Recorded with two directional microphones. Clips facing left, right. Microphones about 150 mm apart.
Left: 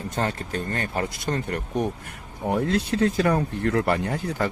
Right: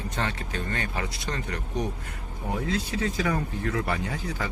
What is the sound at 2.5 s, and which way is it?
Speech, 60° left (ahead or behind).